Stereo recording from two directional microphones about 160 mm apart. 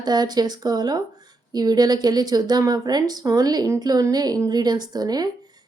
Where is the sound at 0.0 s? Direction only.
25° right (ahead or behind).